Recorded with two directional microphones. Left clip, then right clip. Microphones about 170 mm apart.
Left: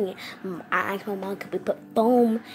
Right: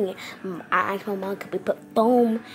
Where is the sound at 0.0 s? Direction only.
5° right (ahead or behind).